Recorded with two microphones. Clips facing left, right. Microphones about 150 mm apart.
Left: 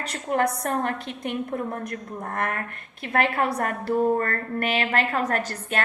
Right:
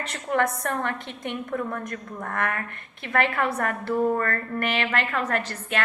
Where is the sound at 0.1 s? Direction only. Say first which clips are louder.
Left 1 dB; 40° left (ahead or behind).